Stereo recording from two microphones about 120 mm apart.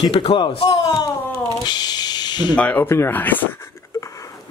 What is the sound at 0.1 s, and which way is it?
Speech, 50° left (ahead or behind).